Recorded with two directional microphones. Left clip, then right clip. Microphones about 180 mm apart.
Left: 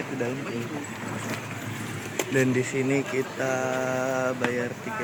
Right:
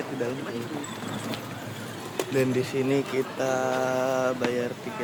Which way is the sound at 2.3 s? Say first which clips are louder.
Left 1 dB; 5° left (ahead or behind).